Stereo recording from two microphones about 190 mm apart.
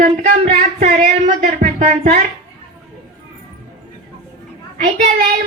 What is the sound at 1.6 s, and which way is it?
Music, 40° right (ahead or behind).